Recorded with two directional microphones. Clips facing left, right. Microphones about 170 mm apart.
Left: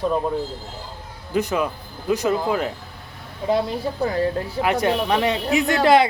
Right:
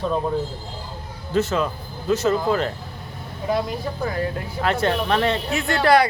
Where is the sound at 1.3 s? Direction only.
15° left (ahead or behind).